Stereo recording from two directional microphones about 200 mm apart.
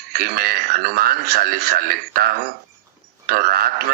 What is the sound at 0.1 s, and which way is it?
A man's voice, 50° right (ahead or behind).